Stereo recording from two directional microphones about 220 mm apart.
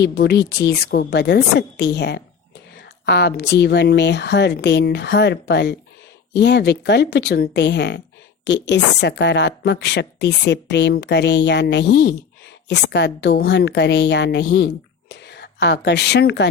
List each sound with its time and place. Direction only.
0.0 s a woman's voice: 50° left (ahead or behind)